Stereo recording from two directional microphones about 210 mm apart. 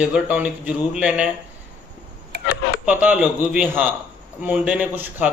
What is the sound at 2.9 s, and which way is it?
A man's voice, 5° right (ahead or behind).